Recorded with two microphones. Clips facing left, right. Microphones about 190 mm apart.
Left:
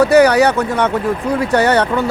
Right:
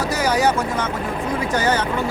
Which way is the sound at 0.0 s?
65° left (ahead or behind).